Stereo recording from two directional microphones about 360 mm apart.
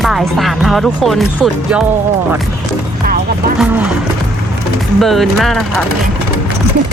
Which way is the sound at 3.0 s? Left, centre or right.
Right.